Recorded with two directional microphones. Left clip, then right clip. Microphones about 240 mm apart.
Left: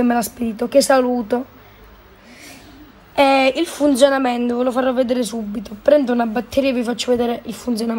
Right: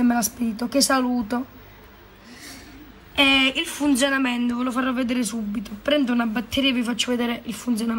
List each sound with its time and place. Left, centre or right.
0.0 s speech: centre
3.5 s speech: centre